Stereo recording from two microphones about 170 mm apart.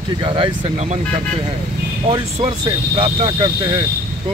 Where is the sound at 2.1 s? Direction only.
35° right (ahead or behind).